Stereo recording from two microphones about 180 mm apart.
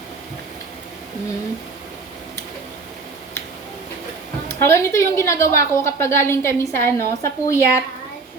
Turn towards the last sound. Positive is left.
turn(degrees=15)  # may be behind; listen again after turning